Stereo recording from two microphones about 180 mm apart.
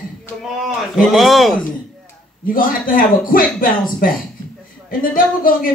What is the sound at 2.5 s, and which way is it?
A man's voice, 50° left (ahead or behind).